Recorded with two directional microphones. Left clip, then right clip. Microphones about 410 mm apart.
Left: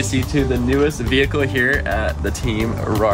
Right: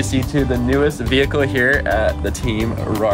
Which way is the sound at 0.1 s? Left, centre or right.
Centre.